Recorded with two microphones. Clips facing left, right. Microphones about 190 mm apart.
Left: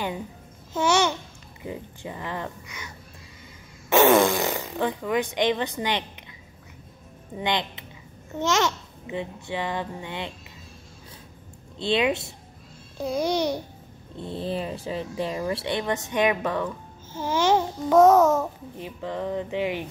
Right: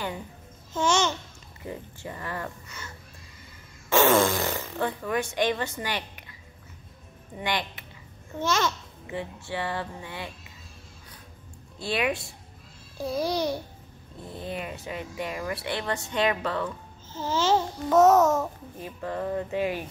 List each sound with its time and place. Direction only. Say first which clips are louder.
0.7 s babbling: left 3 dB; 10° left (ahead or behind)
1.6 s speech: left 2 dB; 15° left (ahead or behind)
3.9 s speech: left 3 dB; 15° left (ahead or behind)
7.3 s speech: left 3 dB; 20° left (ahead or behind)
11.8 s speech: left 4 dB; 25° left (ahead or behind)